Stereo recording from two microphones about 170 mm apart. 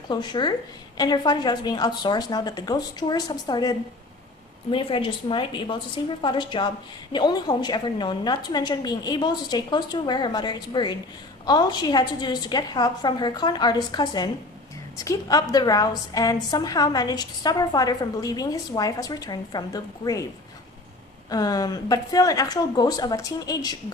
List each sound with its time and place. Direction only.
0.1 s a woman's voice: 25° left (ahead or behind)
21.2 s a woman's voice: 20° left (ahead or behind)